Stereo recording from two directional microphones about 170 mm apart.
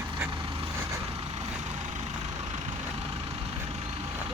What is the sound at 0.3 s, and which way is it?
Vehicle, 30° right (ahead or behind).